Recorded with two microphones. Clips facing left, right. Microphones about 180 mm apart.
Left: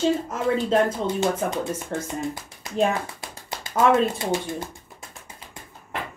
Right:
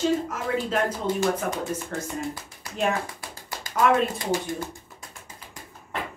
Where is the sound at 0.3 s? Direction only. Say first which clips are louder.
Left 5 dB; 30° left (ahead or behind).